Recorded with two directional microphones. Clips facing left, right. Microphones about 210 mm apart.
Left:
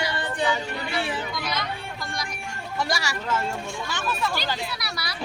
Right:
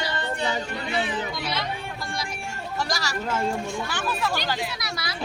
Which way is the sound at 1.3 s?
25° right (ahead or behind).